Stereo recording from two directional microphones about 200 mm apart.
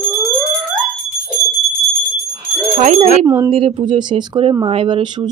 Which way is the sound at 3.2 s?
15° right (ahead or behind).